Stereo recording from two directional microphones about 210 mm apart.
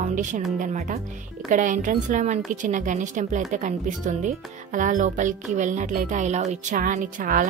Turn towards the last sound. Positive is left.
turn(degrees=-40)  # may be behind; listen again after turning